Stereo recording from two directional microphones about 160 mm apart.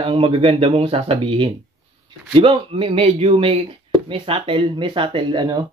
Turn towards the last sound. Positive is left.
turn(degrees=-30)  # may be behind; listen again after turning